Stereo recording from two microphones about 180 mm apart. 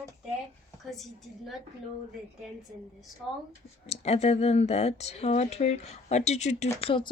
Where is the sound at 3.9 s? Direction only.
35° left (ahead or behind).